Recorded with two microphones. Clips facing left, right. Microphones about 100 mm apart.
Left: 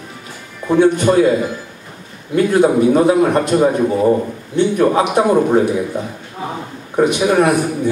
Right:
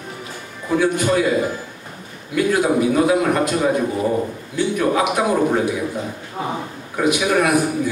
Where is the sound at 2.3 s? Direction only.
30° left (ahead or behind).